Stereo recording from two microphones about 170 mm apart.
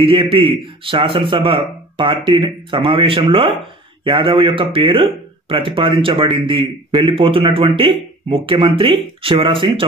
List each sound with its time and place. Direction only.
0.0 s speech: 30° right (ahead or behind)